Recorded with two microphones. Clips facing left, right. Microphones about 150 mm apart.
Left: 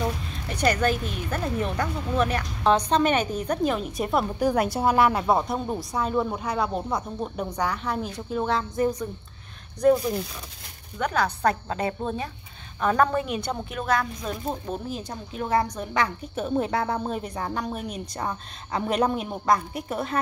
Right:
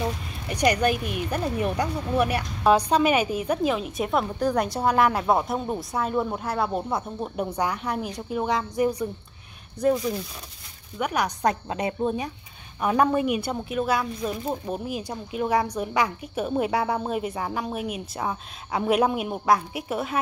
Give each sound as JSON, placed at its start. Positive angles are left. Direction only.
{"t": 0.5, "sound": "a woman's voice", "side_deg": -15}
{"t": 11.0, "sound": "a woman's voice", "side_deg": -15}